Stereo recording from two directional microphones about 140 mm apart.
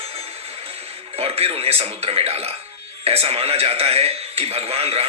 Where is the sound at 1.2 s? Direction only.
45° right (ahead or behind).